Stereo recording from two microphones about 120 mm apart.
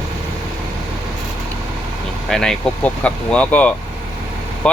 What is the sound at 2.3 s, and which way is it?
Speech, 5° left (ahead or behind).